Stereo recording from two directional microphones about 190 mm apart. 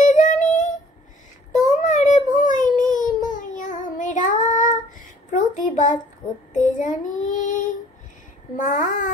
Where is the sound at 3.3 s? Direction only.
45° left (ahead or behind).